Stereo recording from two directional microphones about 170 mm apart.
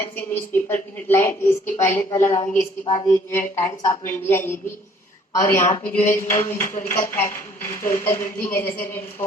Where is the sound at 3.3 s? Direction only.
15° left (ahead or behind).